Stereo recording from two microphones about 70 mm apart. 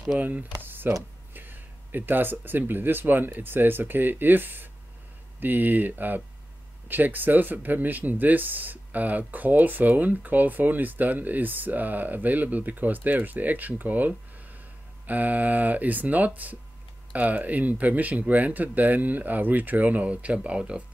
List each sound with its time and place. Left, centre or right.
0.2 s speech: right